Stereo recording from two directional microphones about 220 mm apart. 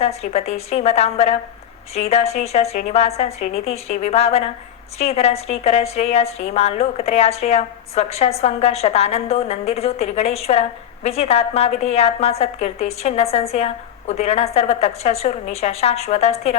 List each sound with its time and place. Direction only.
0.0 s a woman's voice: 30° left (ahead or behind)